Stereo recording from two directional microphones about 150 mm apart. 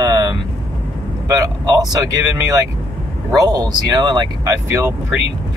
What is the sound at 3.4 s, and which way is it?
Speech, 25° right (ahead or behind).